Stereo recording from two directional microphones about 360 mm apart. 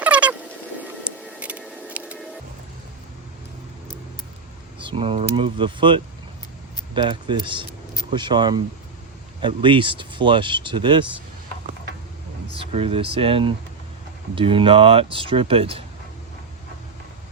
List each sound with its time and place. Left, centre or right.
0.0 s fowl: centre
0.8 s music: centre
4.8 s speech: centre
12.5 s speech: centre